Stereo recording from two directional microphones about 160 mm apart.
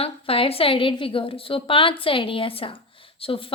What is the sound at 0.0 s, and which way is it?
A woman's voice, 35° left (ahead or behind).